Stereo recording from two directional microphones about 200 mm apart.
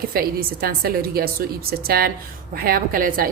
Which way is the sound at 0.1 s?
45° right (ahead or behind).